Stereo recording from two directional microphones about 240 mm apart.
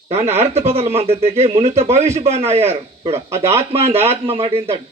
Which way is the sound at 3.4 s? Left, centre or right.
Centre.